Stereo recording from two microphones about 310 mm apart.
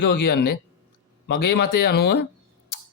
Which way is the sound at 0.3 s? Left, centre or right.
Left.